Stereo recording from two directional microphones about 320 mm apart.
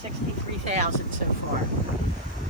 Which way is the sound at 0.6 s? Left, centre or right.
Right.